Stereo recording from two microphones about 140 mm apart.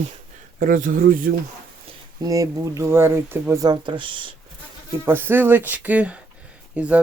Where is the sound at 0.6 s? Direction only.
80° right.